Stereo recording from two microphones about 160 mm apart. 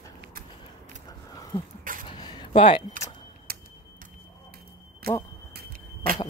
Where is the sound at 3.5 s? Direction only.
70° right (ahead or behind).